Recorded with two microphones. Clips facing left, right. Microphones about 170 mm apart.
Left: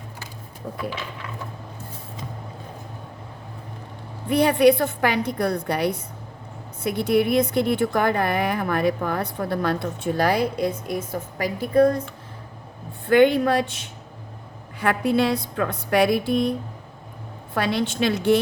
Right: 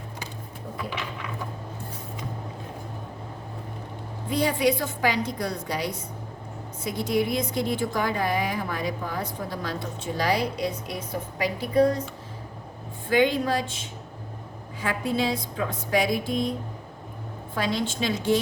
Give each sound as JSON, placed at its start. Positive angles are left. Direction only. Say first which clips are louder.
{"t": 4.3, "sound": "speech", "louder": "left 7 dB", "side_deg": 65}
{"t": 17.5, "sound": "speech", "louder": "left 4 dB", "side_deg": 65}